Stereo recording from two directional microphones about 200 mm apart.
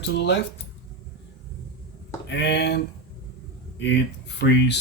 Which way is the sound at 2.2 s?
60° left (ahead or behind).